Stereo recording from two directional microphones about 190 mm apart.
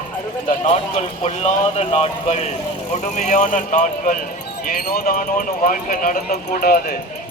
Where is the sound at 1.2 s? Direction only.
35° left (ahead or behind).